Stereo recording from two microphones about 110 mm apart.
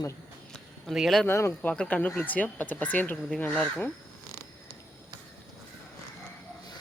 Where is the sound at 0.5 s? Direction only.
Centre (ahead or behind).